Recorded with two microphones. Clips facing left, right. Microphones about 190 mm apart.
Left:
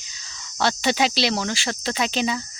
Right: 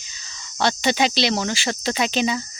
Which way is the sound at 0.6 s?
Centre (ahead or behind).